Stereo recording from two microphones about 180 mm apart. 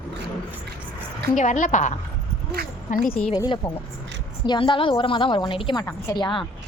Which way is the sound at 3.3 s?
20° left (ahead or behind).